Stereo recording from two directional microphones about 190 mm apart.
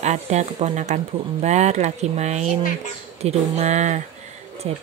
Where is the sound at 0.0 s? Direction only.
35° right (ahead or behind).